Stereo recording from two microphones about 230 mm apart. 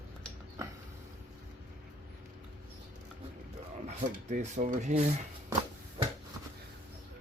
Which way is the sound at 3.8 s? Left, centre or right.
Right.